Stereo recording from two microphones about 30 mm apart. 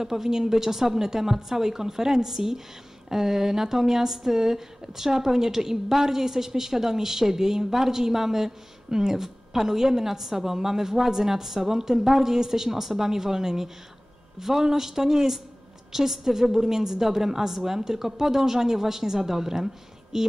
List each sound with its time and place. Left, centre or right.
0.0 s speech: centre